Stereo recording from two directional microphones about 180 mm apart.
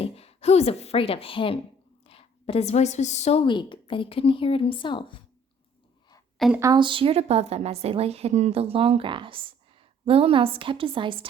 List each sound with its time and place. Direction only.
0.0 s a woman's voice: 35° left (ahead or behind)
6.6 s a woman's voice: 25° right (ahead or behind)